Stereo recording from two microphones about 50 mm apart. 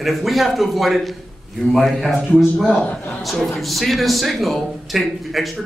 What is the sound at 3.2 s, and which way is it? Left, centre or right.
Speech, centre.